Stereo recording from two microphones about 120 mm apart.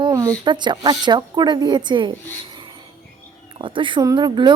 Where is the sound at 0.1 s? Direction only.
30° right (ahead or behind).